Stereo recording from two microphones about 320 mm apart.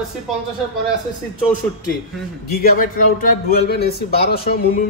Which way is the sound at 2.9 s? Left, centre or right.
Left.